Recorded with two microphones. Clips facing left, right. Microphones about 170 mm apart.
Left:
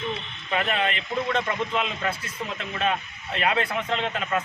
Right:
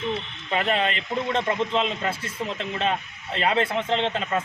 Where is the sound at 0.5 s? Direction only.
30° right (ahead or behind).